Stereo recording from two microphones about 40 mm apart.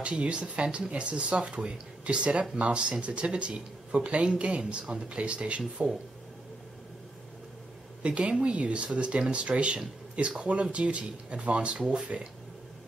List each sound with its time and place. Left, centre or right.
0.0 s speech: right
8.2 s speech: right